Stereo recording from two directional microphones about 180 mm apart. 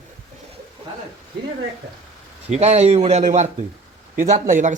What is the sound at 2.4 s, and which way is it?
A man's voice, 35° right (ahead or behind).